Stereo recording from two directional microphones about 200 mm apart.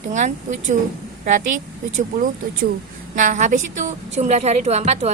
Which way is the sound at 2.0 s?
40° right (ahead or behind).